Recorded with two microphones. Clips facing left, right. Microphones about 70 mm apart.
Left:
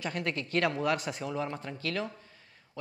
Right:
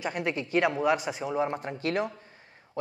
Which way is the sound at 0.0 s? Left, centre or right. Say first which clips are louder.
Right 3 dB; centre.